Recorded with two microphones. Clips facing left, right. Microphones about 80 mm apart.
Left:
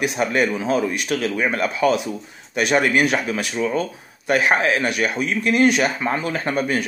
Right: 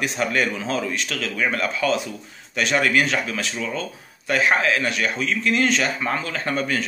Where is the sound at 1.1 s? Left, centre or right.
Left.